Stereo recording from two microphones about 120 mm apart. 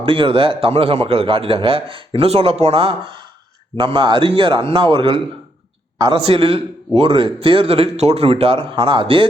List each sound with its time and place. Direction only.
0.0 s a man's voice: 45° right (ahead or behind)